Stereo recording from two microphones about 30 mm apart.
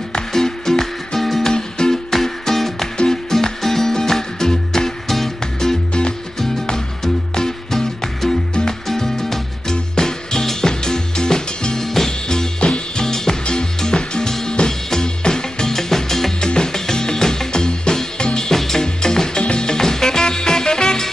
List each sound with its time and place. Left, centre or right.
0.3 s music: centre
1.5 s music: left
2.0 s music: centre
7.3 s music: centre
11.8 s music: centre
12.1 s music: left
16.3 s music: left
18.5 s music: centre